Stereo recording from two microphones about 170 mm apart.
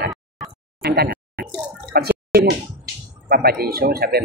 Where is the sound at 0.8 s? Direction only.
65° right (ahead or behind).